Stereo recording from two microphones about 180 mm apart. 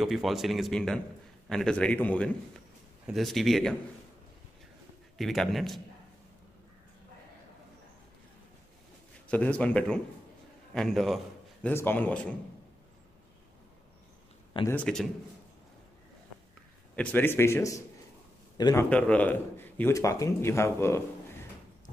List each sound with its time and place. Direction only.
0.0 s a man's voice: centre (ahead or behind)
5.1 s speech: centre (ahead or behind)
9.3 s a man's voice: 10° left (ahead or behind)
11.6 s a man's voice: 10° left (ahead or behind)
14.7 s speech: 5° left (ahead or behind)
16.9 s a man's voice: 10° left (ahead or behind)
18.9 s a man's voice: 5° left (ahead or behind)